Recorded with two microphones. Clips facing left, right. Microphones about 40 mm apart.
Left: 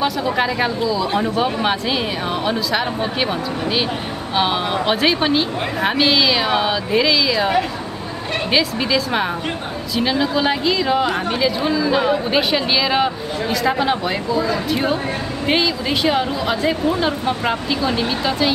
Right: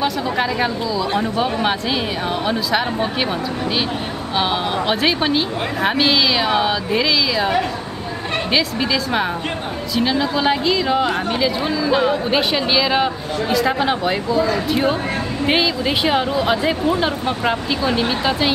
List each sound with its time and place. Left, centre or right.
0.0 s speech: centre
4.4 s speech: centre